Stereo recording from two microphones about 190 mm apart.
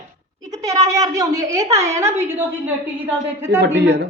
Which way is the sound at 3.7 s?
60° right (ahead or behind).